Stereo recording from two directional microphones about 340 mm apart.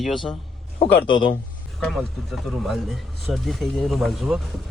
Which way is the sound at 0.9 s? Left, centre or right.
Left.